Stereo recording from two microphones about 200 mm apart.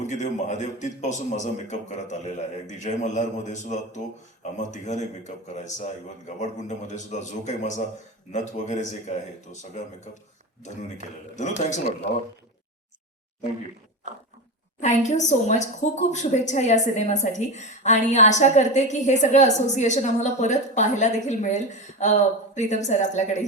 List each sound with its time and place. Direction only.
0.0 s a woman's voice: 35° left (ahead or behind)
14.8 s a woman's voice: 35° left (ahead or behind)